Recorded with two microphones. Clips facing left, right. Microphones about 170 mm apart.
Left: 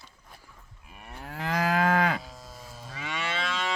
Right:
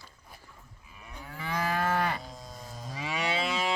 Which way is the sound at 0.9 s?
60° left (ahead or behind).